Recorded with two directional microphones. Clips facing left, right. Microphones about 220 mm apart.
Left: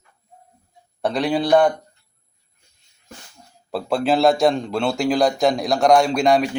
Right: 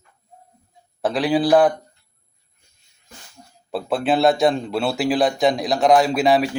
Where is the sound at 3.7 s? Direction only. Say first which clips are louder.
Left 1 dB; centre (ahead or behind).